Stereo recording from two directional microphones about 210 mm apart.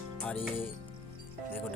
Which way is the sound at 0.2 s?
5° left (ahead or behind).